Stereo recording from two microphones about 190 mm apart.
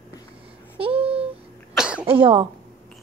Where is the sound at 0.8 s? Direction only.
30° right (ahead or behind).